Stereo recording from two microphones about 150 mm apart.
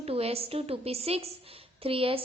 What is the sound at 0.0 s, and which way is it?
A woman's voice, 40° right (ahead or behind).